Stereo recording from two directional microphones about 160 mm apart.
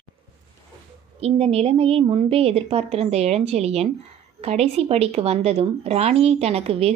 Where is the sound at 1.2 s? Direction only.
40° right (ahead or behind).